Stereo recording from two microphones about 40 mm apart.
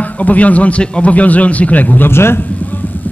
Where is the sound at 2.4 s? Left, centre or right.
Left.